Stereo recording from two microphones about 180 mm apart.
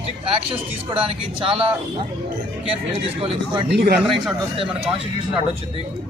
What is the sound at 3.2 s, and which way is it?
Speech, 30° right (ahead or behind).